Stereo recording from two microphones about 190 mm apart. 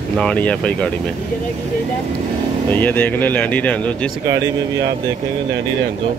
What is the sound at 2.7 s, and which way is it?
Speech, 10° left (ahead or behind).